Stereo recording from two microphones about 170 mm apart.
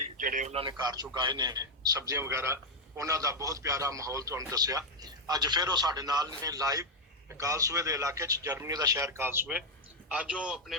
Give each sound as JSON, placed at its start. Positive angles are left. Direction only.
{"t": 0.2, "sound": "a man's voice", "side_deg": -50}
{"t": 0.5, "sound": "a man's voice", "side_deg": -25}